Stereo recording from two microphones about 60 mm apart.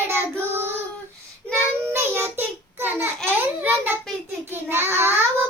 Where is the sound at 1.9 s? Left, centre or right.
Right.